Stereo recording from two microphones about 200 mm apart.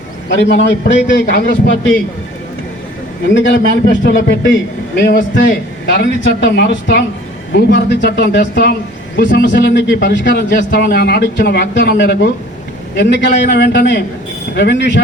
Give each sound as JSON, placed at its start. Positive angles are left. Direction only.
{"t": 0.3, "sound": "a man's voice", "side_deg": 60}
{"t": 3.3, "sound": "a man's voice", "side_deg": 65}